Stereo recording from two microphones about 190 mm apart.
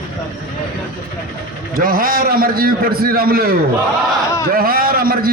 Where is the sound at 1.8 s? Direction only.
50° right (ahead or behind).